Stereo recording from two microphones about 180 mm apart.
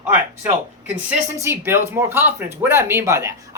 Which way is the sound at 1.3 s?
15° right (ahead or behind).